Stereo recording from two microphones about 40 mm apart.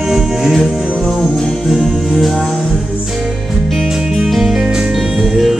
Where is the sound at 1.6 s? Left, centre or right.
Centre.